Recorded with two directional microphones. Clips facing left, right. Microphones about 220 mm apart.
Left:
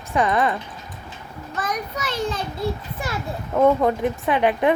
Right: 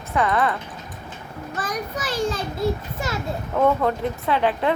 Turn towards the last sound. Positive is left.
turn(degrees=15)  # may be behind; listen again after turning